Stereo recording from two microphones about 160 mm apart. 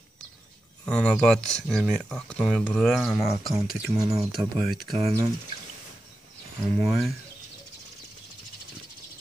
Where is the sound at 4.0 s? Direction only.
20° right (ahead or behind).